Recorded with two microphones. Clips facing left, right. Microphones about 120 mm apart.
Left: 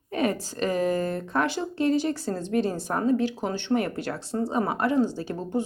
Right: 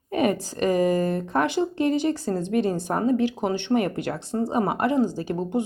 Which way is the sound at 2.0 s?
15° right (ahead or behind).